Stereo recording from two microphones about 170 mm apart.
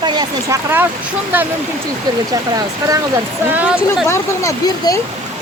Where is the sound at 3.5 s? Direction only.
10° right (ahead or behind).